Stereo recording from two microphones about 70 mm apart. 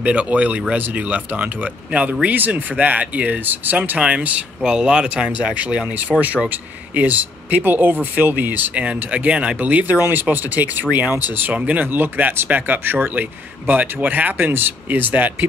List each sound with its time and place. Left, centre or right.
0.0 s speech: centre